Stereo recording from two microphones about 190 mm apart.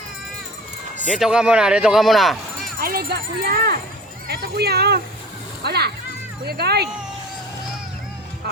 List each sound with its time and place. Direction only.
1.1 s a man's voice: 5° right (ahead or behind)
2.8 s speech: 55° right (ahead or behind)